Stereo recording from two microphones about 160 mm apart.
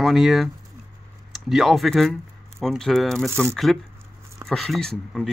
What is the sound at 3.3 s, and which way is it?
Speech, 15° right (ahead or behind).